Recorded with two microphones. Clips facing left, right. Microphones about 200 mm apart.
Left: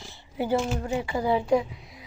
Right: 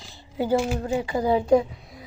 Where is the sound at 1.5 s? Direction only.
45° right (ahead or behind).